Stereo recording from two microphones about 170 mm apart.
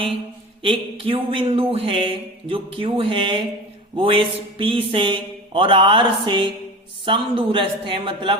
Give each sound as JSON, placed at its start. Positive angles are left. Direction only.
{"t": 0.6, "sound": "speech", "side_deg": -30}